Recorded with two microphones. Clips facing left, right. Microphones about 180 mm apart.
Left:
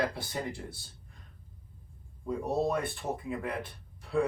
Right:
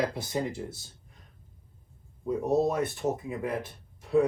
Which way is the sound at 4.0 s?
20° right (ahead or behind).